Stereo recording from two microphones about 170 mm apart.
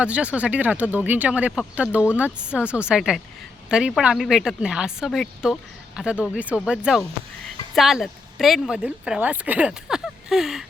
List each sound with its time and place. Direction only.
0.0 s a woman's voice: 5° right (ahead or behind)